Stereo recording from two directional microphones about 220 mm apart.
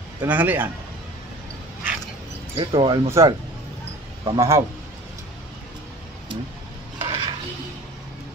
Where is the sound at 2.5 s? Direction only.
25° right (ahead or behind).